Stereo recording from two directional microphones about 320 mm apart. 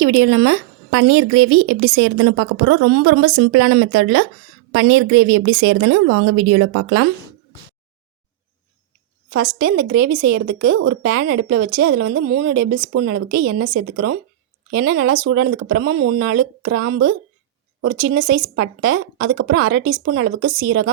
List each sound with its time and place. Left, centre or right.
0.0 s a woman's voice: right
9.3 s a woman's voice: right